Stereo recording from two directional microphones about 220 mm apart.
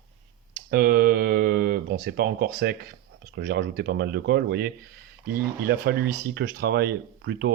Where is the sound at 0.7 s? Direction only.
40° right (ahead or behind).